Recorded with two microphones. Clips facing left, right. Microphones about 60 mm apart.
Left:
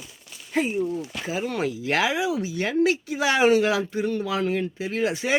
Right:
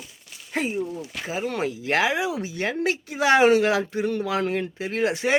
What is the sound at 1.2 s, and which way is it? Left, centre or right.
Speech, right.